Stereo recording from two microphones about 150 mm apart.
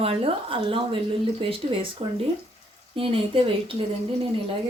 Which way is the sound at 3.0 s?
35° right (ahead or behind).